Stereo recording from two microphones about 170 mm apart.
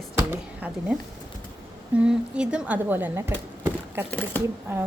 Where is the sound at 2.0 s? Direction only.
5° right (ahead or behind).